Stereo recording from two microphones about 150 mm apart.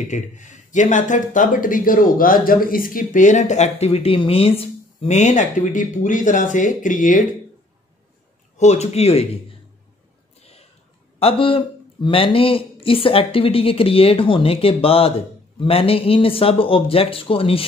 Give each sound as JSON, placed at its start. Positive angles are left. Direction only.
{"t": 0.1, "sound": "speech", "side_deg": 55}
{"t": 8.5, "sound": "a man's voice", "side_deg": 50}
{"t": 11.1, "sound": "speech", "side_deg": 40}